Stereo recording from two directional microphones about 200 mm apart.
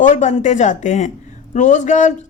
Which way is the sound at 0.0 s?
40° left (ahead or behind).